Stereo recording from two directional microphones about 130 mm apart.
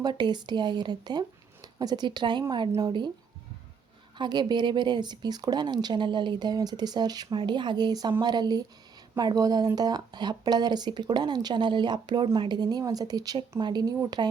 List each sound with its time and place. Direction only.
0.0 s speech: 35° right (ahead or behind)
4.2 s speech: 35° right (ahead or behind)